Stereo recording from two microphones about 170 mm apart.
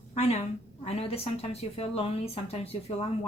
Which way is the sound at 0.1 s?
40° left (ahead or behind).